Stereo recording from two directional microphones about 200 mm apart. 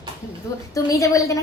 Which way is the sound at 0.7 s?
15° left (ahead or behind).